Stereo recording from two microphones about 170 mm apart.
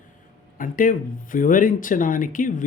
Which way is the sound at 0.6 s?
50° left (ahead or behind).